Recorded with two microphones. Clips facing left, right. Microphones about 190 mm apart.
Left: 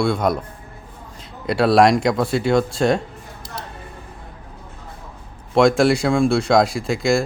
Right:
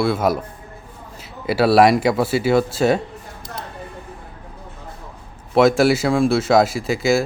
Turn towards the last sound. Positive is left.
turn(degrees=-5)  # may be behind; listen again after turning